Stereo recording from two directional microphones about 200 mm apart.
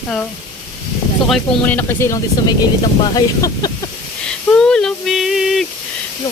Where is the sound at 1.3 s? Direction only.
10° left (ahead or behind).